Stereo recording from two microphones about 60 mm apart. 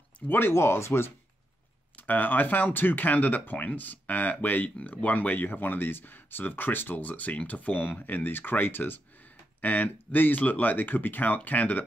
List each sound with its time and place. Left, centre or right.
0.3 s speech: left
2.0 s speech: left